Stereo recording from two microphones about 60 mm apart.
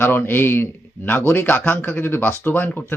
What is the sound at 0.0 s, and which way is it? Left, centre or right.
Speech, left.